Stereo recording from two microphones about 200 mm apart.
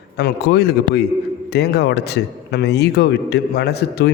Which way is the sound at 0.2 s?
55° left (ahead or behind).